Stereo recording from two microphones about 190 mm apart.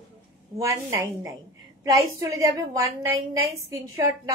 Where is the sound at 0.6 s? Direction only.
15° right (ahead or behind).